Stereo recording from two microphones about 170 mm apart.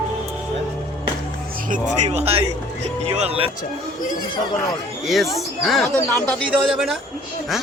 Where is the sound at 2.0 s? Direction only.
40° right (ahead or behind).